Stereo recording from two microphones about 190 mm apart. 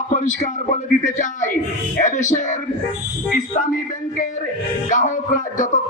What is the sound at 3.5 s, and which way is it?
Speech, 40° left (ahead or behind).